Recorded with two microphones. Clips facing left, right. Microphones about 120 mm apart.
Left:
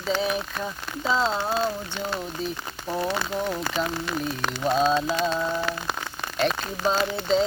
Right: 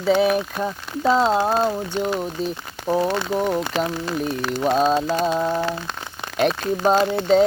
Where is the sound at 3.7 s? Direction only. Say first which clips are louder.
Right 1 dB; 90° right.